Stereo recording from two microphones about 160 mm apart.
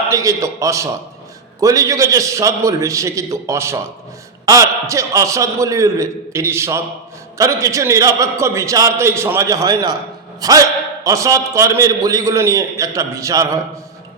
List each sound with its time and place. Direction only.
0.1 s a man's voice: 20° right (ahead or behind)